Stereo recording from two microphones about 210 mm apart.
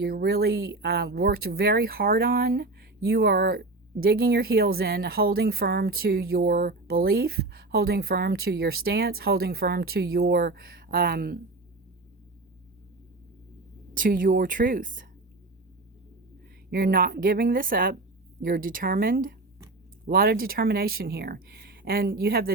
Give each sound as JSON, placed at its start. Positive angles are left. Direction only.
{"t": 0.0, "sound": "speech", "side_deg": -50}
{"t": 13.9, "sound": "a woman's voice", "side_deg": -40}
{"t": 16.6, "sound": "speech", "side_deg": -45}